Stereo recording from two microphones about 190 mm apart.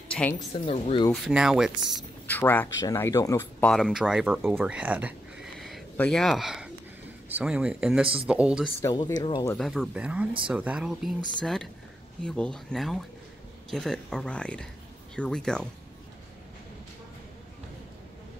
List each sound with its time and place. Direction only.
0.1 s a sound: 5° left (ahead or behind)
0.7 s speech: 30° left (ahead or behind)
1.1 s speech: centre (ahead or behind)
2.2 s speech: 10° left (ahead or behind)
3.7 s speech: centre (ahead or behind)
8.8 s speech: 20° left (ahead or behind)
9.6 s speech: centre (ahead or behind)